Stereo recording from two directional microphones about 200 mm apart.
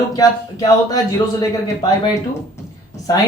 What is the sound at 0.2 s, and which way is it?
A man's voice, 20° left (ahead or behind).